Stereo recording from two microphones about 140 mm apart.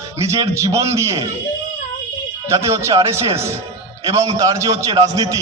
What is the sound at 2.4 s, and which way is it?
A man's voice, 20° right (ahead or behind).